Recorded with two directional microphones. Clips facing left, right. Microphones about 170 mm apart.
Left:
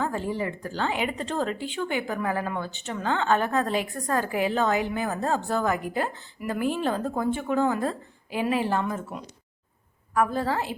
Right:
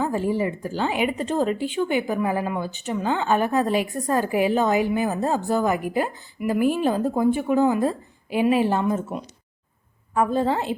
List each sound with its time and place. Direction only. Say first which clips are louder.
0.0 s a woman's voice: right 5 dB; 15° right (ahead or behind)